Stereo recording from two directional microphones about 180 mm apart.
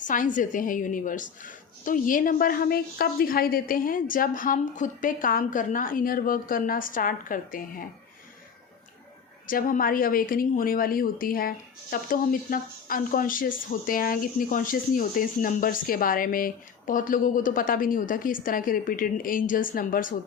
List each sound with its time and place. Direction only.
0.0 s a woman's voice: 45° left (ahead or behind)
9.5 s a woman's voice: 50° left (ahead or behind)